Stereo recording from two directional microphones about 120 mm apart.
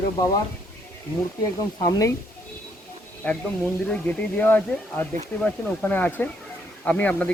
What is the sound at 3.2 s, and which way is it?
Speech, 15° left (ahead or behind).